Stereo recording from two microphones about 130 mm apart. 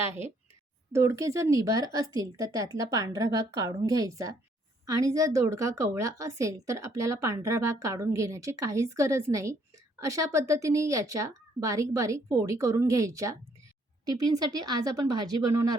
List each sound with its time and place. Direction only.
0.0 s a woman's voice: 20° right (ahead or behind)